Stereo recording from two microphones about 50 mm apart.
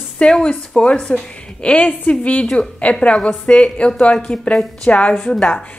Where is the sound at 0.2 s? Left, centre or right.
Centre.